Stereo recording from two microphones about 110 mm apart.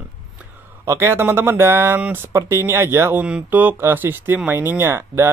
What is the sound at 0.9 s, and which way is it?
Speech, 25° right (ahead or behind).